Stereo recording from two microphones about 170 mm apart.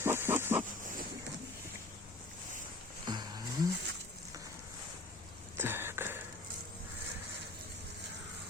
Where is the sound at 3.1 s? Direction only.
25° right (ahead or behind).